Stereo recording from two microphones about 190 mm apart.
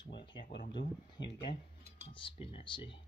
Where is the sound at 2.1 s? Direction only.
30° left (ahead or behind).